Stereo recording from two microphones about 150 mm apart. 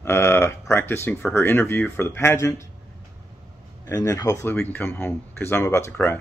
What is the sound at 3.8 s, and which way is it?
Speech, 20° left (ahead or behind).